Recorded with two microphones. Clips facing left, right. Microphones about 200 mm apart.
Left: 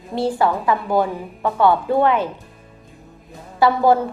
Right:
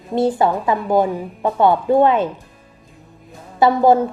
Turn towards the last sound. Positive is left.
turn(degrees=-20)  # may be behind; listen again after turning